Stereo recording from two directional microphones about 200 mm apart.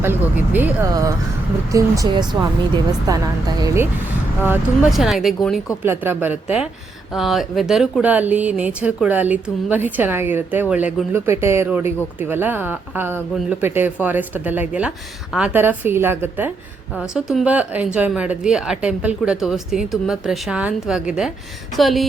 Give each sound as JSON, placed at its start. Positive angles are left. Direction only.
{"t": 0.0, "sound": "speech", "side_deg": -10}
{"t": 4.4, "sound": "speech", "side_deg": 0}